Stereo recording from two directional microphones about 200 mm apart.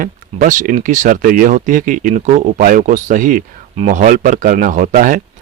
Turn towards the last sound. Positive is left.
turn(degrees=-40)  # may be behind; listen again after turning